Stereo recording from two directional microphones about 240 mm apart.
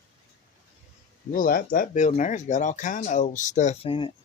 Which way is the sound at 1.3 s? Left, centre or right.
Left.